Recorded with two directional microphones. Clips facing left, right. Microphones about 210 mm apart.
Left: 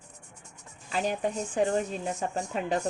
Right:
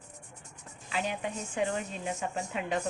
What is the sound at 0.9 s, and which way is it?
A woman's voice, 40° left (ahead or behind).